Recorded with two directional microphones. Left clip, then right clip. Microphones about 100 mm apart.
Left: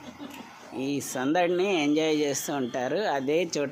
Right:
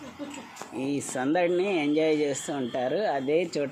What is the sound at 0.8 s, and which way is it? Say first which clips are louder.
Speech: even; centre (ahead or behind).